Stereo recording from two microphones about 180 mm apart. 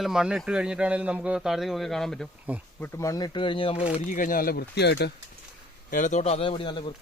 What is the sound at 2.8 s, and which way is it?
Speech, 15° left (ahead or behind).